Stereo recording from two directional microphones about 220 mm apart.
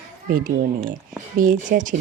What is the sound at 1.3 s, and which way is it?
Speech, 40° right (ahead or behind).